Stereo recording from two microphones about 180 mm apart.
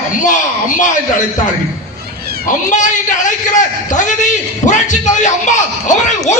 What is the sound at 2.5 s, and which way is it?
A man's voice, 45° left (ahead or behind).